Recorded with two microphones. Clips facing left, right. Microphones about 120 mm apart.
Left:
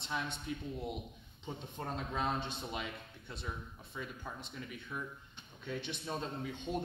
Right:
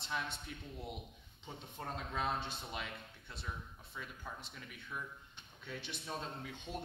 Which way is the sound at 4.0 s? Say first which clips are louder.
Left 3 dB; 5° left (ahead or behind).